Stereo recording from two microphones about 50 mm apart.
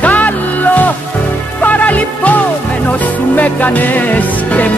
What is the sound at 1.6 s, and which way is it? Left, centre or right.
Music, left.